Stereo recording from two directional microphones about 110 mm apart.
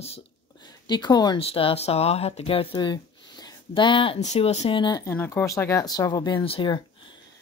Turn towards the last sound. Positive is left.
turn(degrees=55)  # may be behind; listen again after turning